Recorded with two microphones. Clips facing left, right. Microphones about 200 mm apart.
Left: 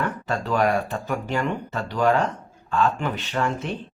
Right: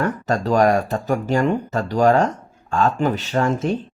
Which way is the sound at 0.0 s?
40° right (ahead or behind).